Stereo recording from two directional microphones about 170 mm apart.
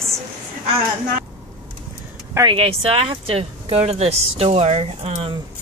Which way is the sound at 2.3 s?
30° right (ahead or behind).